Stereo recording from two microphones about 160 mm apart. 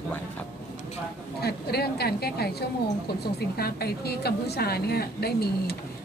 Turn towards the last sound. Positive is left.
turn(degrees=80)